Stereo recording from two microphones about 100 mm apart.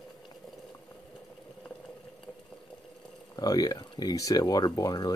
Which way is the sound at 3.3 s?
40° left (ahead or behind).